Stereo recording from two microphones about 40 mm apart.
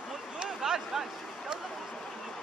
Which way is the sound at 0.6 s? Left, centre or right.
Centre.